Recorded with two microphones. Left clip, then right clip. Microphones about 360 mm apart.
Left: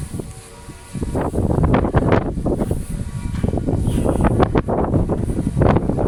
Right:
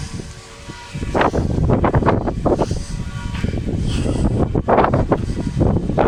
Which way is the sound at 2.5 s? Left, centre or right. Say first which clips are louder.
Right 8 dB; right.